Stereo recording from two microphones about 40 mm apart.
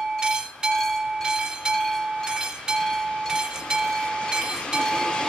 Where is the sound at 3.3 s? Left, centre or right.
Right.